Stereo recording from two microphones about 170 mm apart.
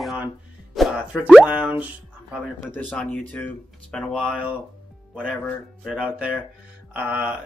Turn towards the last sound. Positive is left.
turn(degrees=-10)  # may be behind; listen again after turning